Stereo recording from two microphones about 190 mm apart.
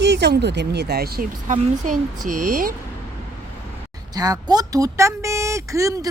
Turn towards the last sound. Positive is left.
turn(degrees=-15)  # may be behind; listen again after turning